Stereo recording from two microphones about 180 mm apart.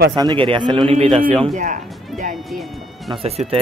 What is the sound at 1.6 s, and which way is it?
Speech, 45° right (ahead or behind).